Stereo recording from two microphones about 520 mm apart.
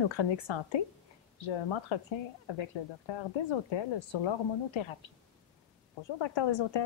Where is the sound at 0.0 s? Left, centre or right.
Left.